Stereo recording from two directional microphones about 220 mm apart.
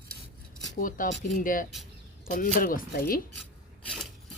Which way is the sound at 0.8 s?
40° left (ahead or behind).